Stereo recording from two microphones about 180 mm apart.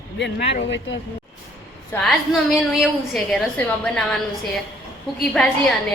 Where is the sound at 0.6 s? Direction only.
90° left.